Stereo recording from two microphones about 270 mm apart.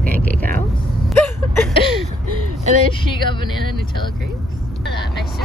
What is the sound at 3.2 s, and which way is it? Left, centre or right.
Speech, centre.